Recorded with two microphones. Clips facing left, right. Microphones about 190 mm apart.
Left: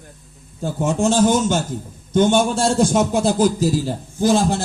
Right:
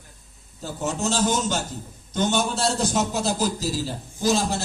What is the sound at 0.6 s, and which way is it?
A man's voice, 50° left (ahead or behind).